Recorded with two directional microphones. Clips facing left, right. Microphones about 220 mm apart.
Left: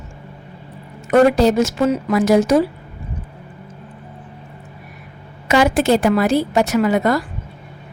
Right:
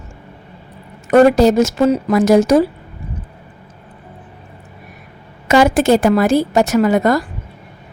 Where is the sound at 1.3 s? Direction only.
45° right (ahead or behind).